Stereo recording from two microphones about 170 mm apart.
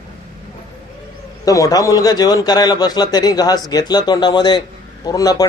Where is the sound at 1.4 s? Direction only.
20° left (ahead or behind).